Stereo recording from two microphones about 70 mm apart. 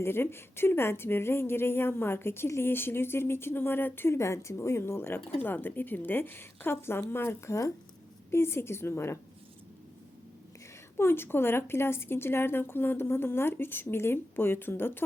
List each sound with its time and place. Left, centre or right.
0.0 s a woman's voice: left
10.9 s a woman's voice: left